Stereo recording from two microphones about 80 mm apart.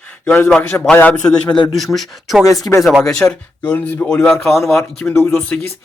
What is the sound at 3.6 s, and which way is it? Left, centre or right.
Speech, left.